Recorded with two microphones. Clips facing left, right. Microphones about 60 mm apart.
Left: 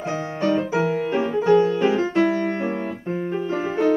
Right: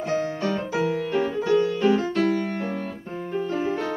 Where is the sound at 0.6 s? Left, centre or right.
Centre.